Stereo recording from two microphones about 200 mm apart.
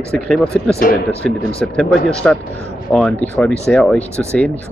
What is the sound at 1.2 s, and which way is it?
Speech, 5° left (ahead or behind).